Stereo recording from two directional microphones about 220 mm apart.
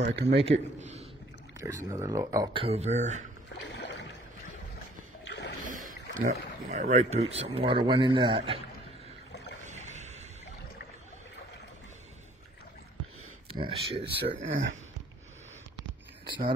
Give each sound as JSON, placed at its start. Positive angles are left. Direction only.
{"t": 0.0, "sound": "speech", "side_deg": -50}
{"t": 0.3, "sound": "speech", "side_deg": -25}
{"t": 1.6, "sound": "speech", "side_deg": -15}
{"t": 3.6, "sound": "boat", "side_deg": 55}
{"t": 5.7, "sound": "boat", "side_deg": -35}
{"t": 6.1, "sound": "speech", "side_deg": -35}
{"t": 9.7, "sound": "a sound", "side_deg": -30}
{"t": 13.5, "sound": "speech", "side_deg": -25}
{"t": 14.2, "sound": "speech", "side_deg": -50}
{"t": 16.3, "sound": "speech", "side_deg": -20}